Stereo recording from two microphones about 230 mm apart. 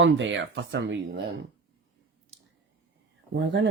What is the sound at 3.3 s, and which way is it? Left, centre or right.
Speech, right.